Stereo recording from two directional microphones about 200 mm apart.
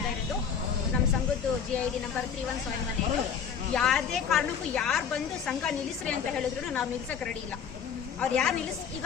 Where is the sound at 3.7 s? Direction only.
Centre (ahead or behind).